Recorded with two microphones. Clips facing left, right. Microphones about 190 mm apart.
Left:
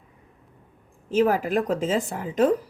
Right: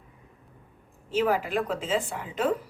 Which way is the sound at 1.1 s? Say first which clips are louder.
Left 4 dB; 45° left (ahead or behind).